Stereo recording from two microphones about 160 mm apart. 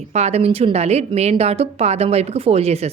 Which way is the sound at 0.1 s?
40° right (ahead or behind).